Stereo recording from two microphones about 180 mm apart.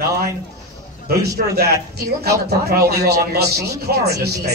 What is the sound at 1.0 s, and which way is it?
A woman's voice, 60° right (ahead or behind).